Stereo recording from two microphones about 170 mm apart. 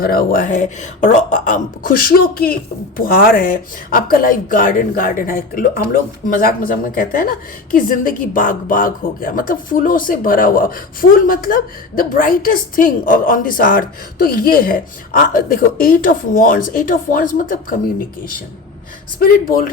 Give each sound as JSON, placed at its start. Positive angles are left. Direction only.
{"t": 0.0, "sound": "speech", "side_deg": 60}
{"t": 19.2, "sound": "speech", "side_deg": 60}